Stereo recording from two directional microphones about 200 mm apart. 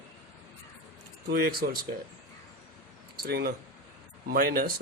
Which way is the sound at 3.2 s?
50° right (ahead or behind).